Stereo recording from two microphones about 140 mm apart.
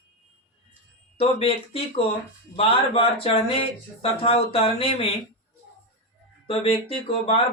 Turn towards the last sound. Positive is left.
turn(degrees=40)  # may be behind; listen again after turning